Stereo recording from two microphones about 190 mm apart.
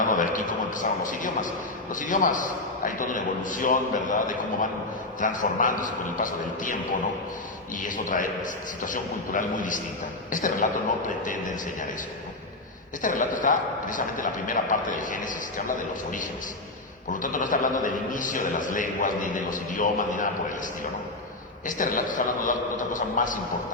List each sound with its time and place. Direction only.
0.0 s a man's voice: 45° left (ahead or behind)
7.8 s a man's voice: 45° left (ahead or behind)
13.0 s a man's voice: 45° left (ahead or behind)
17.2 s a man's voice: 45° left (ahead or behind)
21.7 s a man's voice: 45° left (ahead or behind)